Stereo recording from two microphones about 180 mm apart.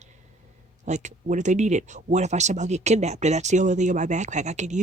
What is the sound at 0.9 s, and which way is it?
Speech, 40° right (ahead or behind).